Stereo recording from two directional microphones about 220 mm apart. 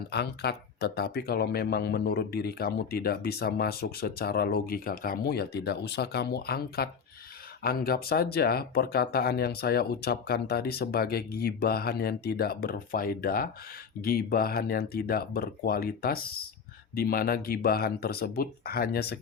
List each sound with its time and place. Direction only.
0.1 s speech: 50° left (ahead or behind)